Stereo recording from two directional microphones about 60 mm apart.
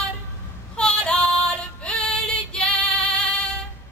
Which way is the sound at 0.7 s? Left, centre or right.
Centre.